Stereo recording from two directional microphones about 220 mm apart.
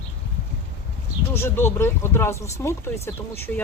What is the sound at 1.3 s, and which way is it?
Speech, 10° left (ahead or behind).